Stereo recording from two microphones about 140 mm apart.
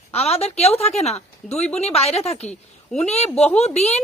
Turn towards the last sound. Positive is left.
turn(degrees=50)  # may be behind; listen again after turning